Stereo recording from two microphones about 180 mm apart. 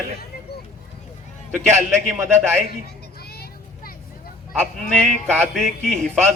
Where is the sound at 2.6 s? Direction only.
60° left (ahead or behind).